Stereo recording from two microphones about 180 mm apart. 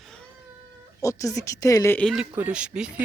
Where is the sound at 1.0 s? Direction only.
20° left (ahead or behind).